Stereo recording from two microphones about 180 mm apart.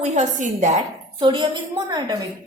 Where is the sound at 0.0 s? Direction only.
40° right (ahead or behind).